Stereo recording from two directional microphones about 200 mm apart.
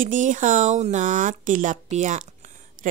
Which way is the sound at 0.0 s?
40° right (ahead or behind).